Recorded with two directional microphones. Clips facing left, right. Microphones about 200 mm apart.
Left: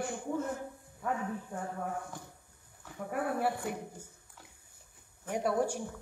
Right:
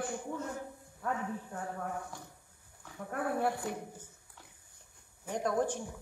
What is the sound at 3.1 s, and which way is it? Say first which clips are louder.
Speech: even; 5° left (ahead or behind).